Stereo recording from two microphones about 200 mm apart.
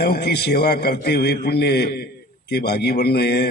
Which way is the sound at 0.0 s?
55° left (ahead or behind).